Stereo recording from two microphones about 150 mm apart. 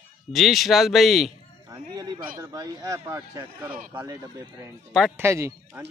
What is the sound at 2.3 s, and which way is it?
Speech, 25° right (ahead or behind).